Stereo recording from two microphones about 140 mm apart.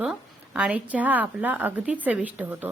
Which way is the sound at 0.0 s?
10° right (ahead or behind).